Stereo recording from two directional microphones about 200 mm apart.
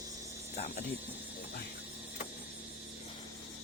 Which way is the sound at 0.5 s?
35° left (ahead or behind).